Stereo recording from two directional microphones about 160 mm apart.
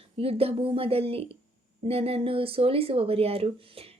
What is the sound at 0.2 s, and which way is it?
Speech, 35° right (ahead or behind).